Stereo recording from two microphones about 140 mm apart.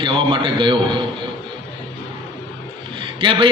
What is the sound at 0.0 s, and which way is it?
Speech, 40° right (ahead or behind).